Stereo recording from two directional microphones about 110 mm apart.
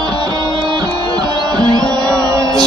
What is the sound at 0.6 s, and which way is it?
Music, 40° right (ahead or behind).